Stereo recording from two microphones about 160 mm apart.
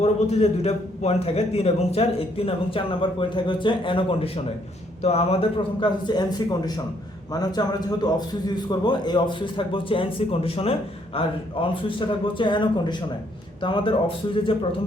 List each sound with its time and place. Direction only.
0.0 s a man's voice: 40° left (ahead or behind)